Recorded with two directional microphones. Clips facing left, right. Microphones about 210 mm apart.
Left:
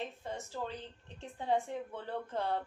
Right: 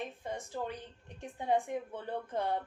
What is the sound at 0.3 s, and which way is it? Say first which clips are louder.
A woman's voice: right 2 dB; 15° right (ahead or behind).